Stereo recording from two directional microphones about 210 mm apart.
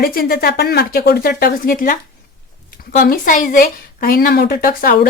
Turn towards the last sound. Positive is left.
turn(degrees=45)  # may be behind; listen again after turning